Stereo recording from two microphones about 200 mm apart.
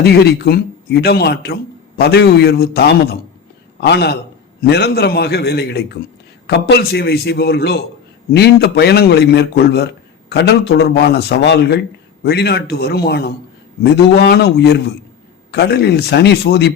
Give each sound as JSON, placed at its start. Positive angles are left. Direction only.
{"t": 0.0, "sound": "a man's voice", "side_deg": 50}